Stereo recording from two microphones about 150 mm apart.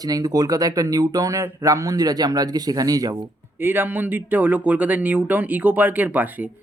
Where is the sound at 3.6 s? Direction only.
15° right (ahead or behind).